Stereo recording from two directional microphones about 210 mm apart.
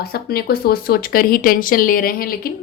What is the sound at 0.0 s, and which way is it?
Speech, 45° left (ahead or behind).